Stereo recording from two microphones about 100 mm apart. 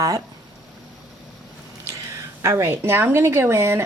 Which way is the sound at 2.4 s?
30° right (ahead or behind).